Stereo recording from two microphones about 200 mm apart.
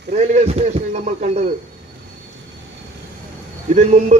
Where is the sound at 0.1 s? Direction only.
35° right (ahead or behind).